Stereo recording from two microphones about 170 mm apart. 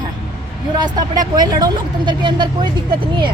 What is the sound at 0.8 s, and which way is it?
Speech, 25° right (ahead or behind).